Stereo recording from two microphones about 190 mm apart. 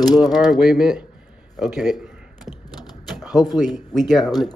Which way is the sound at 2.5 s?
20° left (ahead or behind).